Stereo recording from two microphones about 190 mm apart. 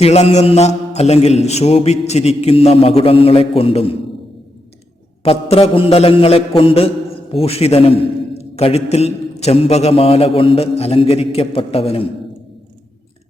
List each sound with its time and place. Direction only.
0.0 s mantra: 35° left (ahead or behind)
5.2 s mantra: 30° left (ahead or behind)